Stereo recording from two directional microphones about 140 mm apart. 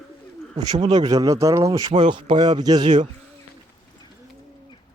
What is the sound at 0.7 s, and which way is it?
Speech, 30° right (ahead or behind).